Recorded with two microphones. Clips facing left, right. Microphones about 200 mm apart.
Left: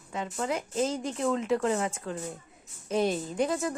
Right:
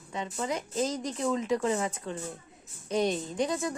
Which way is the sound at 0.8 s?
30° left (ahead or behind).